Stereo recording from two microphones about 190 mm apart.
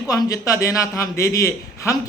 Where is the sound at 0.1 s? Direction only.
20° left (ahead or behind).